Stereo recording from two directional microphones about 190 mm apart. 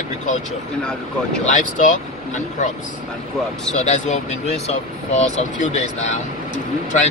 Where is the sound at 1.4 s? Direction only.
40° left (ahead or behind).